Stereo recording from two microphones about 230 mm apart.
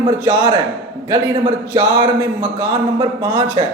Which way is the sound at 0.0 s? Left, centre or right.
Right.